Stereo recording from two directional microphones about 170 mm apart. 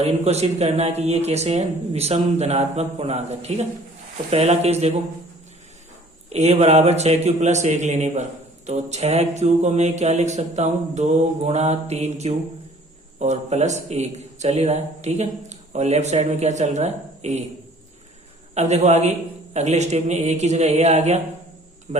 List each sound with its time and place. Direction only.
0.0 s speech: 40° right (ahead or behind)
6.3 s speech: 40° right (ahead or behind)
18.5 s speech: 40° right (ahead or behind)